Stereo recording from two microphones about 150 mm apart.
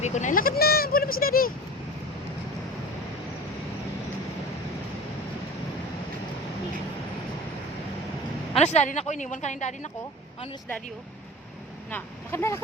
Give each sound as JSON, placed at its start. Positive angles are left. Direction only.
{"t": 0.0, "sound": "speech", "side_deg": 50}
{"t": 8.5, "sound": "a woman's voice", "side_deg": 45}
{"t": 11.9, "sound": "speech", "side_deg": 15}